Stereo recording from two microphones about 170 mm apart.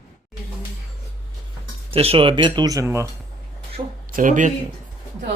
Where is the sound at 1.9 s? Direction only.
35° right (ahead or behind); by 3.1 s 15° right (ahead or behind).